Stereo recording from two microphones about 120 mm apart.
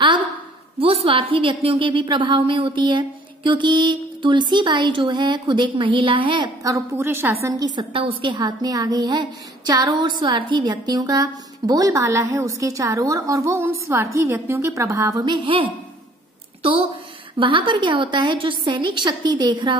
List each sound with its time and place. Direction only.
0.7 s a woman's voice: 50° right (ahead or behind)
6.6 s a woman's voice: 25° right (ahead or behind)
7.4 s a woman's voice: 30° right (ahead or behind)
7.9 s a woman's voice: 45° right (ahead or behind); by 15.2 s 25° right (ahead or behind)
15.2 s a woman's voice: 45° right (ahead or behind)
17.4 s a woman's voice: 45° right (ahead or behind)